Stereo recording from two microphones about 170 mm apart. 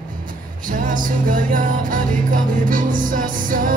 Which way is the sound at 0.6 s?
50° right (ahead or behind).